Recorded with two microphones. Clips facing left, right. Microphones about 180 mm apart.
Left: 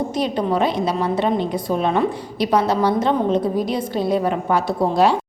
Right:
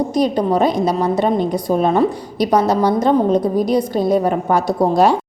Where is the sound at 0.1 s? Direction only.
40° right (ahead or behind).